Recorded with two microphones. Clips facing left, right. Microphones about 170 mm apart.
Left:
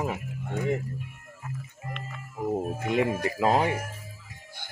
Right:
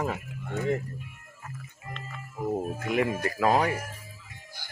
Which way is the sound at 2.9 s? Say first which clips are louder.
Left 1 dB; 20° left (ahead or behind).